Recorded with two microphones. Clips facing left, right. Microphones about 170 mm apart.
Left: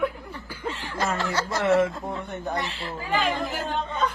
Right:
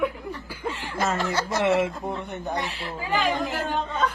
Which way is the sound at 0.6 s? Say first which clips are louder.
Right 1 dB; 15° right (ahead or behind).